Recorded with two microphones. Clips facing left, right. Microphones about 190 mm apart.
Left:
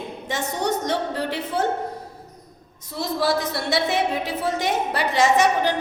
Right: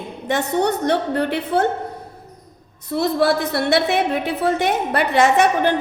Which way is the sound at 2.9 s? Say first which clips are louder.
Right 5 dB; 60° right (ahead or behind).